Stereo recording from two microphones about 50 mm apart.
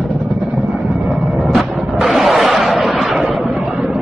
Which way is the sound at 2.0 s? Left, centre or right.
Centre.